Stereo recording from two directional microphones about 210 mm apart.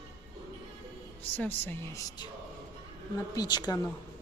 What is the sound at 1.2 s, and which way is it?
Speech, 10° left (ahead or behind).